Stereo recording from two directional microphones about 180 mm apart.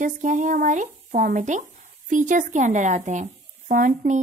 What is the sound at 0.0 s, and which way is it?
Speech, 45° right (ahead or behind).